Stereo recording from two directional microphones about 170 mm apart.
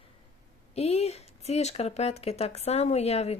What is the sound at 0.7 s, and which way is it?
Speech, 40° left (ahead or behind).